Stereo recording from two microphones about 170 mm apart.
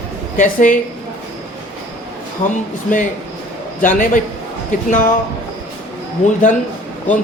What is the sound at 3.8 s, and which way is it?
Speech, 50° left (ahead or behind).